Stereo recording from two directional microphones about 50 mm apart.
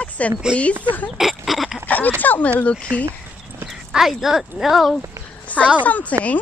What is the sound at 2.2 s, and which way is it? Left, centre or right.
Speech, left.